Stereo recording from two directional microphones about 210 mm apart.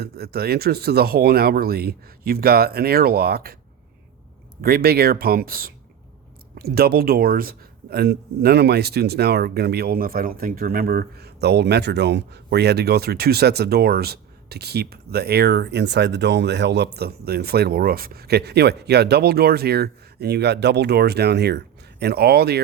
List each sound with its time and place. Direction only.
0.0 s speech: 50° right (ahead or behind)
4.6 s speech: 45° right (ahead or behind)